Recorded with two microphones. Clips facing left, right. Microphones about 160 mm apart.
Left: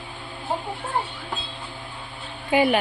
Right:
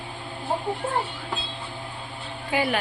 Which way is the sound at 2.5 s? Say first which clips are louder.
Left 6 dB; 20° left (ahead or behind).